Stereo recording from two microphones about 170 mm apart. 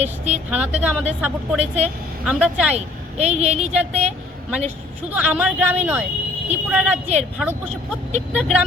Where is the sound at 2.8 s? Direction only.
40° right (ahead or behind).